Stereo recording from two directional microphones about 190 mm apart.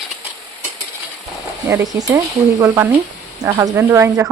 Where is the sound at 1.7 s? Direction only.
10° right (ahead or behind).